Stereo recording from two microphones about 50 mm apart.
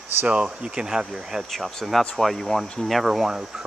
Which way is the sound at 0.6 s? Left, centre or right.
Centre.